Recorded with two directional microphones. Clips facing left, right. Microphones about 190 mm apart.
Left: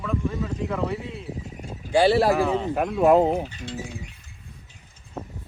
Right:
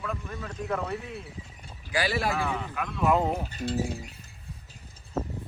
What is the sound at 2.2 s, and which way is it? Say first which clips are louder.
Speech: left 9 dB; 30° left (ahead or behind).